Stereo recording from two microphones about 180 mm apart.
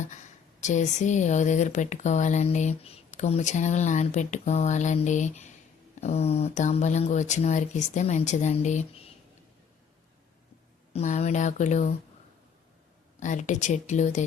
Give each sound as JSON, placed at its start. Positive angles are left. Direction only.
{"t": 0.6, "sound": "speech", "side_deg": 40}
{"t": 10.9, "sound": "speech", "side_deg": 40}
{"t": 13.1, "sound": "speech", "side_deg": 40}